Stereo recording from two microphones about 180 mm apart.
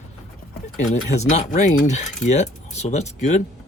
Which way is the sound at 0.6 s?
40° left (ahead or behind).